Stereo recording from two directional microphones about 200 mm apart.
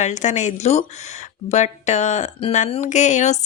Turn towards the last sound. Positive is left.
turn(degrees=35)  # may be behind; listen again after turning